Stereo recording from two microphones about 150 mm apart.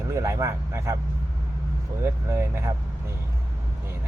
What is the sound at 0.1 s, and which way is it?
Speech, 20° right (ahead or behind).